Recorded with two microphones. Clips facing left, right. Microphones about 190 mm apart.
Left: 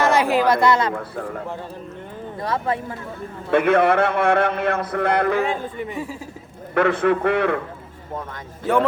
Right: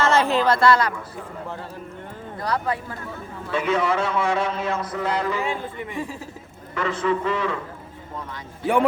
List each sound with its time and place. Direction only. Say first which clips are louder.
0.0 s a woman's voice: left 2 dB; 15° left (ahead or behind)
2.4 s speech: left 1 dB; 25° left (ahead or behind)
3.5 s a man's voice: left 6 dB; 60° left (ahead or behind)
6.7 s a man's voice: left 6 dB; 60° left (ahead or behind)